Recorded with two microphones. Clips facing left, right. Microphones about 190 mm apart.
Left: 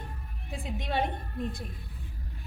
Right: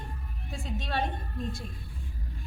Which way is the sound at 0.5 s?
15° left (ahead or behind).